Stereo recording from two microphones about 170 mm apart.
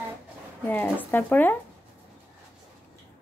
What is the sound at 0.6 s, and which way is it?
Speech, 10° left (ahead or behind).